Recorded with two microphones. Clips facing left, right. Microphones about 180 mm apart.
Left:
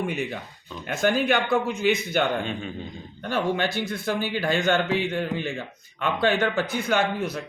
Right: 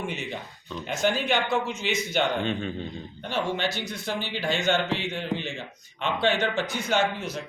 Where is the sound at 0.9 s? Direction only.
55° left (ahead or behind).